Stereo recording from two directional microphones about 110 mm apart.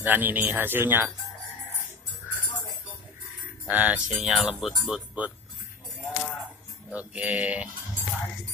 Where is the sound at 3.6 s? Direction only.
15° right (ahead or behind).